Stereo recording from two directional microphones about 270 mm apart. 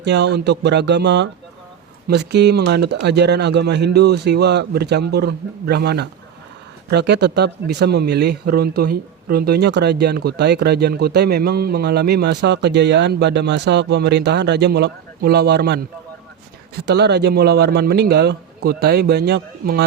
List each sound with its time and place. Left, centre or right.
0.0 s speech: right